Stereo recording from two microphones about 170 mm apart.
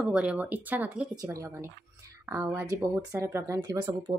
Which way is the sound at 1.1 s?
20° right (ahead or behind).